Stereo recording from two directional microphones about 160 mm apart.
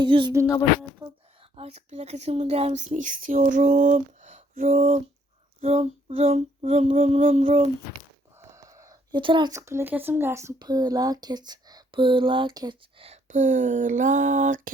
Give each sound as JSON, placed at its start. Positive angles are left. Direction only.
{"t": 0.0, "sound": "speech", "side_deg": -30}
{"t": 1.5, "sound": "speech", "side_deg": -40}
{"t": 8.4, "sound": "a sound", "side_deg": -20}
{"t": 9.5, "sound": "speech", "side_deg": -15}
{"t": 13.2, "sound": "speech", "side_deg": -50}